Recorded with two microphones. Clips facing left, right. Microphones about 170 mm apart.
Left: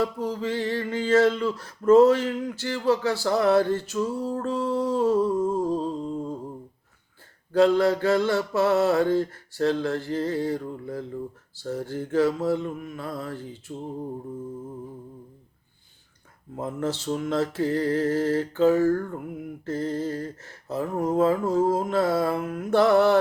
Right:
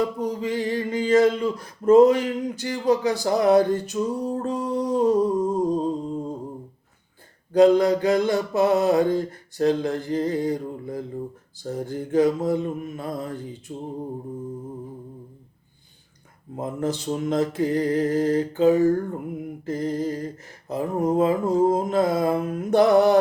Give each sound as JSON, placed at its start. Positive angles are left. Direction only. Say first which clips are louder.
{"t": 0.0, "sound": "speech", "louder": "right 2 dB", "side_deg": -15}
{"t": 7.5, "sound": "speech", "louder": "right 3 dB", "side_deg": -15}
{"t": 16.6, "sound": "speech", "louder": "right 2 dB", "side_deg": -15}